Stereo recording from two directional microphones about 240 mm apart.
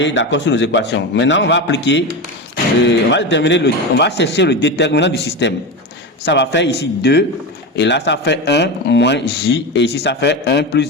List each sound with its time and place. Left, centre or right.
0.0 s speech: left